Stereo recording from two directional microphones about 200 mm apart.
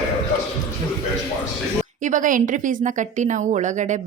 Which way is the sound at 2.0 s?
40° right (ahead or behind).